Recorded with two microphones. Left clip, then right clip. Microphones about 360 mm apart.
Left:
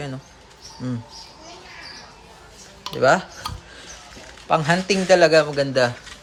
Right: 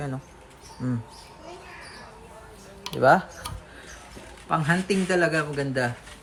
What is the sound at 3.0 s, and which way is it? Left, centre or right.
Speech, centre.